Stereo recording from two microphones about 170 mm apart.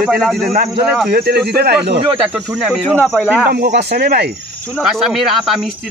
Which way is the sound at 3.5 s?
70° right (ahead or behind).